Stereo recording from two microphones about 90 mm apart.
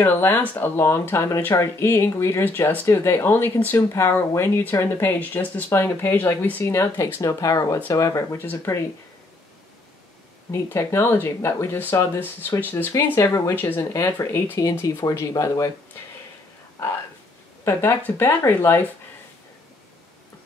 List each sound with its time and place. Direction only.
0.0 s speech: 20° left (ahead or behind)
6.6 s speech: 35° left (ahead or behind)
10.5 s speech: 30° left (ahead or behind)
12.9 s speech: 35° left (ahead or behind)
13.6 s speech: 20° left (ahead or behind)
13.9 s speech: 35° left (ahead or behind)
18.0 s speech: 25° left (ahead or behind)